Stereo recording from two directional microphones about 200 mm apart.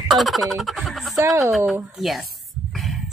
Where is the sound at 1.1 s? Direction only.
15° right (ahead or behind).